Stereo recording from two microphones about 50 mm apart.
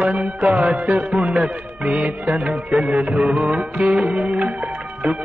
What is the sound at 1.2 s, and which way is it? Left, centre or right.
Music, right.